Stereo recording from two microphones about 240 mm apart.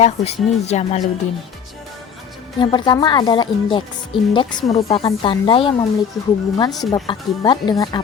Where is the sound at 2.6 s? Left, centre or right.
Centre.